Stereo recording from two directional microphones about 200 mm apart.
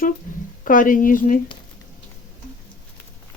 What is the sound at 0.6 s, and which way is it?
Speech, 40° left (ahead or behind).